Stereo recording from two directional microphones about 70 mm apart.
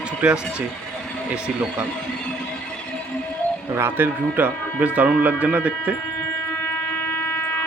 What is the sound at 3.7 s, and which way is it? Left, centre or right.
Speech, right.